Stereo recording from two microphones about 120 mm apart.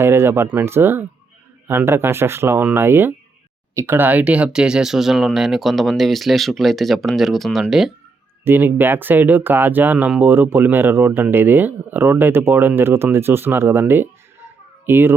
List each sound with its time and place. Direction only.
0.0 s speech: 20° right (ahead or behind); by 7.9 s 5° right (ahead or behind)
8.4 s a child's voice: 15° right (ahead or behind)